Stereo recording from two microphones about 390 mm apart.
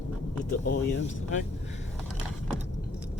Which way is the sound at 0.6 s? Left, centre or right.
Left.